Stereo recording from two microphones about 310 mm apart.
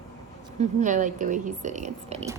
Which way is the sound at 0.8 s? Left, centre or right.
Right.